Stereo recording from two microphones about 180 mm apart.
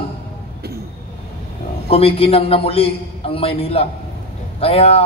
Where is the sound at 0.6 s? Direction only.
60° right (ahead or behind).